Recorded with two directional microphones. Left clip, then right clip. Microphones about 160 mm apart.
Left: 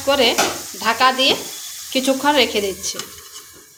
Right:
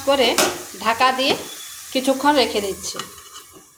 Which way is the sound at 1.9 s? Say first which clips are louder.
Left 1 dB; 10° left (ahead or behind).